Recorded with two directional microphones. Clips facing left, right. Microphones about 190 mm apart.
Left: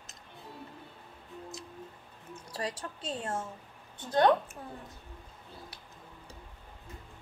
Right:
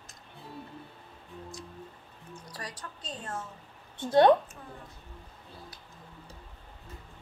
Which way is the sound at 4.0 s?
25° right (ahead or behind).